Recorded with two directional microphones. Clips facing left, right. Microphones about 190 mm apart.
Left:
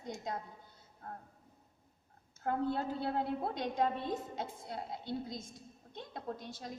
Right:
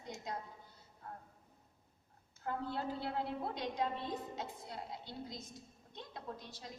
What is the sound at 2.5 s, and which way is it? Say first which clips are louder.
A woman's voice: left 5 dB; 55° left (ahead or behind).